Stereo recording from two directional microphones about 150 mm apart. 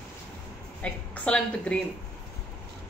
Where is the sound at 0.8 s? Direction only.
5° left (ahead or behind).